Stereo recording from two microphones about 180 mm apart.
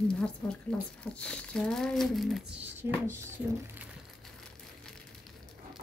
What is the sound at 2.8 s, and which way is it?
Speech, 15° right (ahead or behind).